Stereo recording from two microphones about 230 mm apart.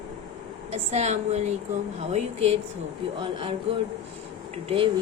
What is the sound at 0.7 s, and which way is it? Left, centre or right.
A woman's voice, right.